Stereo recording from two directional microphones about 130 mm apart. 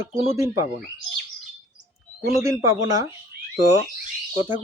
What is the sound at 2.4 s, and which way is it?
Speech, 25° right (ahead or behind).